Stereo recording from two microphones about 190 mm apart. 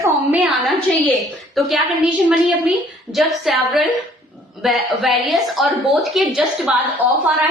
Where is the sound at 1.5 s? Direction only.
Centre (ahead or behind).